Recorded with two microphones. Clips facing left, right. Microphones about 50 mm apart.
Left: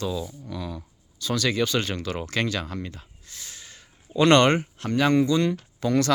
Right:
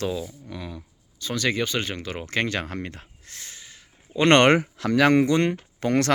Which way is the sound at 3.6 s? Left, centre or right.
Centre.